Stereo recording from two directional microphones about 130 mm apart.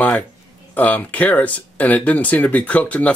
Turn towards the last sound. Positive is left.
turn(degrees=10)  # may be behind; listen again after turning